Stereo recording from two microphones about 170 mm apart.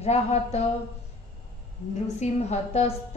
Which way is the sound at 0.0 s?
40° left (ahead or behind).